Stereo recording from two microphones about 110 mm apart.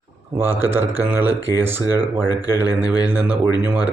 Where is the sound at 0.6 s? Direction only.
20° right (ahead or behind).